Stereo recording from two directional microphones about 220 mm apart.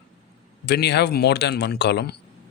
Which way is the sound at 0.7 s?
50° left (ahead or behind).